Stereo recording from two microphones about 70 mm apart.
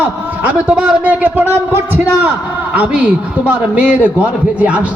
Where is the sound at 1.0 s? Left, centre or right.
Right.